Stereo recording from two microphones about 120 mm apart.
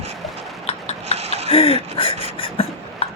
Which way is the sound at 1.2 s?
60° right (ahead or behind).